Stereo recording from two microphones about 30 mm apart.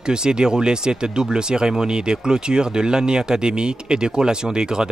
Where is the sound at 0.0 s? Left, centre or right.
Right.